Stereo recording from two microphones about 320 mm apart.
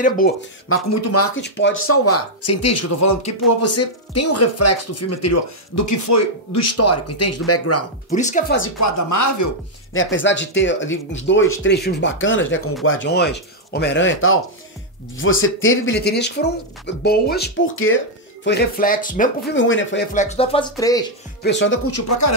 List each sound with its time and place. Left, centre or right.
0.7 s speech: left
1.3 s speech: left
8.1 s speech: left
8.6 s speech: left
9.9 s speech: left
20.2 s speech: centre
21.4 s speech: left